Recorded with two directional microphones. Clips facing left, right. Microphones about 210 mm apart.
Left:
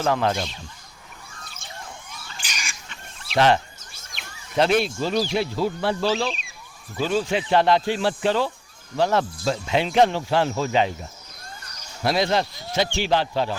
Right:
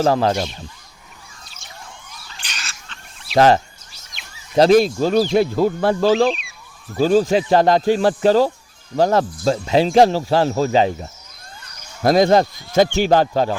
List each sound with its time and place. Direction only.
0.0 s speech: 35° right (ahead or behind)
2.4 s bird: 10° left (ahead or behind)
3.3 s speech: 40° right (ahead or behind)